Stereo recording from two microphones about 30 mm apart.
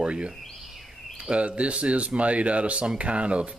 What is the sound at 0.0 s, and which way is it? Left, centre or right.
Speech, right.